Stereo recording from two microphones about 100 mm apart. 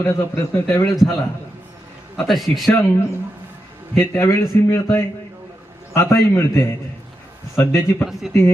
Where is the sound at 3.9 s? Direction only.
25° left (ahead or behind).